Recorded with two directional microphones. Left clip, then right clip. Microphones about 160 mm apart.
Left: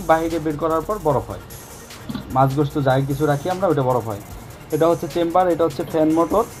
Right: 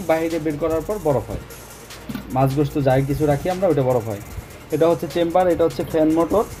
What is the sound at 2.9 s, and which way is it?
Speech, centre (ahead or behind).